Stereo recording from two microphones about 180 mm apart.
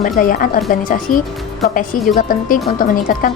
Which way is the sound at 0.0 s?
50° left (ahead or behind).